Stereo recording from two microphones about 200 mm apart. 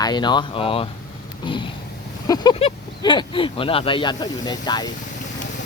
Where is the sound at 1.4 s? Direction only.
25° left (ahead or behind).